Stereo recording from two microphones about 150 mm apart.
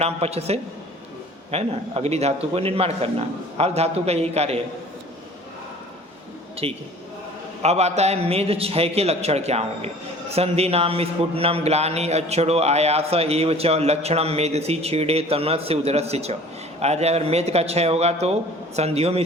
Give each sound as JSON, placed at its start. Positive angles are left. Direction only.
{"t": 0.0, "sound": "a man's voice", "side_deg": -45}
{"t": 6.6, "sound": "a man's voice", "side_deg": -40}